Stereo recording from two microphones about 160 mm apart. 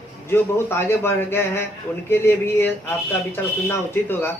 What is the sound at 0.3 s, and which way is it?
Speech, 15° left (ahead or behind).